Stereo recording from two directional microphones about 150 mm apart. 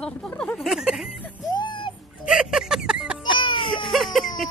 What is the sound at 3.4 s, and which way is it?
Baby cry, 35° left (ahead or behind).